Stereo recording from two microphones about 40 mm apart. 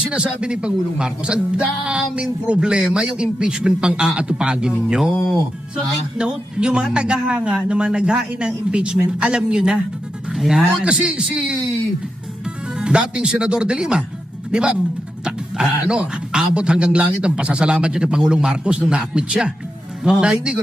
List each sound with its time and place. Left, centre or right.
0.0 s speech: right
5.7 s speech: right
10.3 s music: centre
10.8 s speech: right
12.8 s speech: right